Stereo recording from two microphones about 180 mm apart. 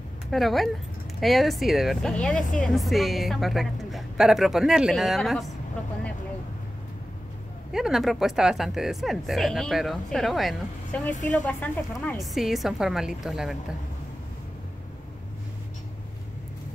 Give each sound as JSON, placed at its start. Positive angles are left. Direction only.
{"t": 0.3, "sound": "speech", "side_deg": 0}
{"t": 2.3, "sound": "speech", "side_deg": 45}
{"t": 2.6, "sound": "speech", "side_deg": 0}
{"t": 7.7, "sound": "speech", "side_deg": 0}